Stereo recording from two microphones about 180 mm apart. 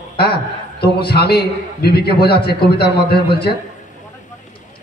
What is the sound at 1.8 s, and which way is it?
Music, 60° left (ahead or behind).